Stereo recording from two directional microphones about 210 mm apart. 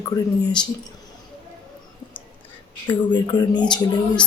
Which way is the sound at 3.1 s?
20° left (ahead or behind).